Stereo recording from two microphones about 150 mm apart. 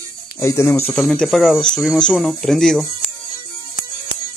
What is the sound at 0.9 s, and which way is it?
Speech, centre (ahead or behind).